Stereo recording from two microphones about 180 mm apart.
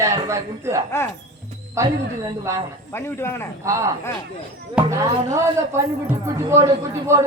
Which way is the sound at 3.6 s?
15° right (ahead or behind).